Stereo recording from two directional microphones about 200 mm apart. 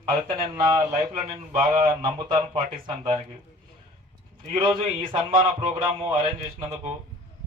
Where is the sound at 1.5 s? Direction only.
35° right (ahead or behind).